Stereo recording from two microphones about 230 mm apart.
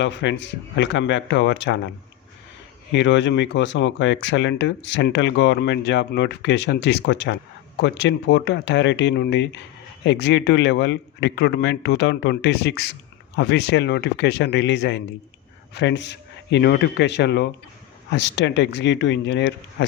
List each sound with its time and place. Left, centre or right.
0.0 s a man's voice: left
2.9 s a man's voice: left